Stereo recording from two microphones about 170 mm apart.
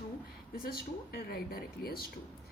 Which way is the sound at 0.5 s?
60° left (ahead or behind).